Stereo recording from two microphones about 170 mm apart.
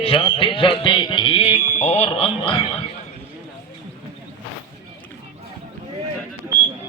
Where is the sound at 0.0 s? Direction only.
30° left (ahead or behind).